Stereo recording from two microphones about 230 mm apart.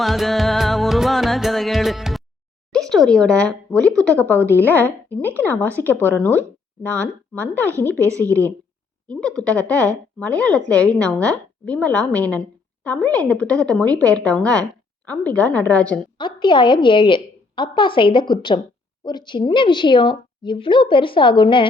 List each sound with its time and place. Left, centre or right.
0.0 s music: centre
2.7 s a woman's voice: centre
7.9 s a woman's voice: centre
9.0 s a woman's voice: centre
16.1 s a woman's voice: left